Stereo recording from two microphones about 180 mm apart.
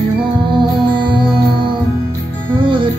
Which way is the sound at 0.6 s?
25° right (ahead or behind).